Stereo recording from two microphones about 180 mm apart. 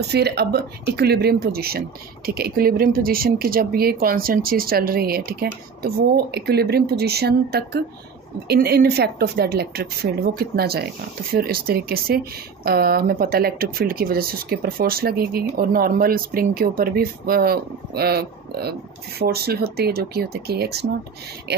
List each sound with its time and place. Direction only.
0.1 s speech: 65° right (ahead or behind)